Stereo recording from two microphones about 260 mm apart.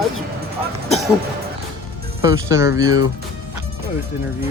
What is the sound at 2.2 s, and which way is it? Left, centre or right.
Speech, centre.